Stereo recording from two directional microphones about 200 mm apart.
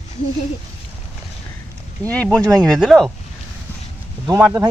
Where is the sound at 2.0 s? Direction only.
5° left (ahead or behind).